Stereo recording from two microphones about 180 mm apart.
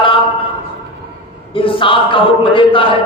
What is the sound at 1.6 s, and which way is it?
Speech, 30° left (ahead or behind).